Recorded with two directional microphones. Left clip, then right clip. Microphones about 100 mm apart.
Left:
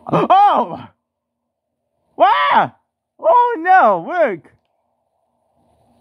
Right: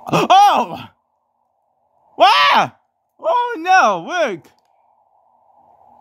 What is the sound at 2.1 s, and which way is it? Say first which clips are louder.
Speech: right 1 dB; 35° right (ahead or behind).